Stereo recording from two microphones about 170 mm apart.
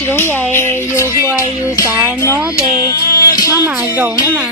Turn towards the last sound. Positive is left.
turn(degrees=20)  # may be behind; listen again after turning